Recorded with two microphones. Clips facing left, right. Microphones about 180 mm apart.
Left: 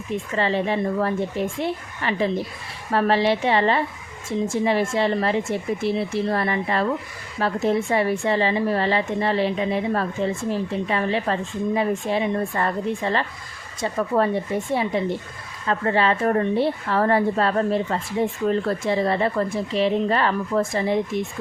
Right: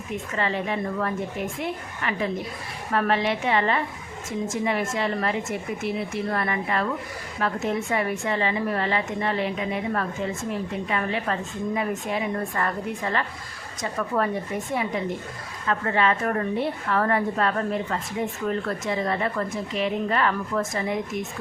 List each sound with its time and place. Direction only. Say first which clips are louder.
0.3 s a woman's voice: left 4 dB; 30° left (ahead or behind)